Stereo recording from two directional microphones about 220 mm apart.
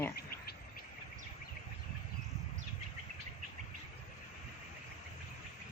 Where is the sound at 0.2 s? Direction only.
45° left (ahead or behind).